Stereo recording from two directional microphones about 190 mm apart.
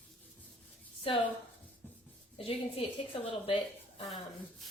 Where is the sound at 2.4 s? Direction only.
30° left (ahead or behind).